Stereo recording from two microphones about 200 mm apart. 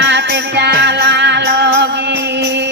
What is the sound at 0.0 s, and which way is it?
Music, 60° right (ahead or behind).